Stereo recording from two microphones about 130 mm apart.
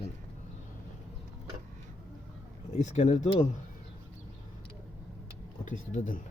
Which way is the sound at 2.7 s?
60° left (ahead or behind).